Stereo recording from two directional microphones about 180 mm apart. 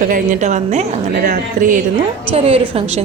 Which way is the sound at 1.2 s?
50° right (ahead or behind).